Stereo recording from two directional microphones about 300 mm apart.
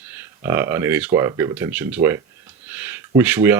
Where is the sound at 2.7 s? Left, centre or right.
Centre.